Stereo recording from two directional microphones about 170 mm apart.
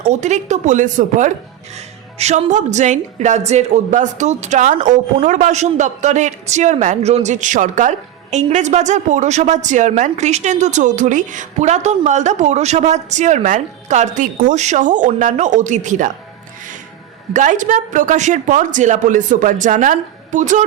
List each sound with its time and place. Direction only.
0.0 s a woman's voice: 45° right (ahead or behind)
17.3 s a woman's voice: 50° right (ahead or behind)